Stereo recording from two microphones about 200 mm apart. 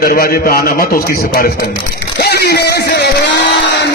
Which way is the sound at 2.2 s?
55° left (ahead or behind).